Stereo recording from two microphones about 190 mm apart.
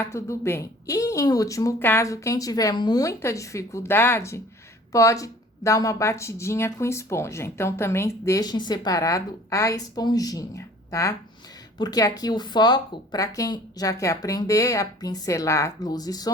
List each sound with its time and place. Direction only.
0.0 s speech: 15° left (ahead or behind)